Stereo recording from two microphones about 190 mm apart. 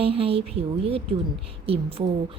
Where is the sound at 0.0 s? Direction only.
30° right (ahead or behind).